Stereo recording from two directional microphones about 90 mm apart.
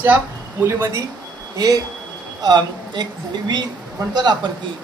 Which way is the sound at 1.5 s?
45° right (ahead or behind).